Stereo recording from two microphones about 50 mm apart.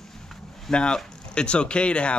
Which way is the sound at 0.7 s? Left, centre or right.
Centre.